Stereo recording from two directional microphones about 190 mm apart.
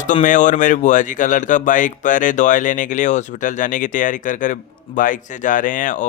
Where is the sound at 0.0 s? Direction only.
40° left (ahead or behind).